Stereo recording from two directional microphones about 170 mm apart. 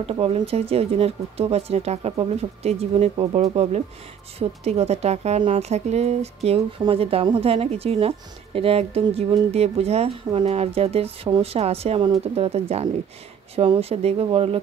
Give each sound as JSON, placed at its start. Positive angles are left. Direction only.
{"t": 0.0, "sound": "speech", "side_deg": -35}